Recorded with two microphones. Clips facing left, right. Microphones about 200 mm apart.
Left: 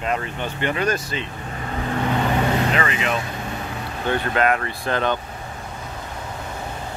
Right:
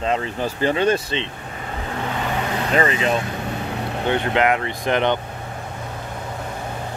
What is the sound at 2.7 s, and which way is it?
Speech, 35° right (ahead or behind).